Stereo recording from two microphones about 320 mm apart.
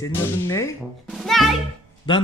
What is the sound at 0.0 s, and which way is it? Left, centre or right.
Speech, centre.